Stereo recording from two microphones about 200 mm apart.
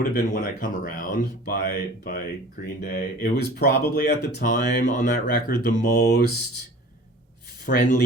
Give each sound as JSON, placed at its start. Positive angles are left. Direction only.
{"t": 0.1, "sound": "speech", "side_deg": 45}
{"t": 7.6, "sound": "speech", "side_deg": 45}